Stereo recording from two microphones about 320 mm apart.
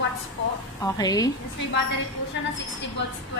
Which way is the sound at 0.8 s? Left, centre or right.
Centre.